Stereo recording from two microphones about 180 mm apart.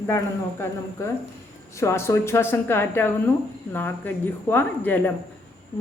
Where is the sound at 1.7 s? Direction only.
15° left (ahead or behind).